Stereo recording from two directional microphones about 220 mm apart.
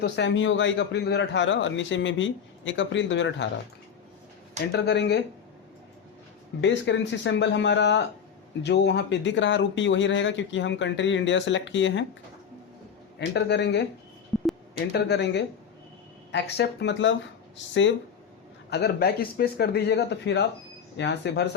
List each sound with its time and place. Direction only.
0.0 s a man's voice: 55° left (ahead or behind)
4.7 s speech: 50° left (ahead or behind)
6.6 s a man's voice: 55° left (ahead or behind)
13.1 s speech: 50° left (ahead or behind)
14.3 s speech: centre (ahead or behind)
14.9 s speech: 50° left (ahead or behind)
18.7 s speech: 45° left (ahead or behind)